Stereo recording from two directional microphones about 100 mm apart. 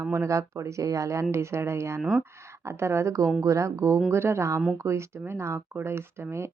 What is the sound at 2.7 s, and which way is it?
Speech, 25° right (ahead or behind).